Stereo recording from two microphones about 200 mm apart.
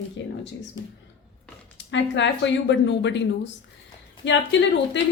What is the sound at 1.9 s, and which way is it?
Speech, 60° left (ahead or behind).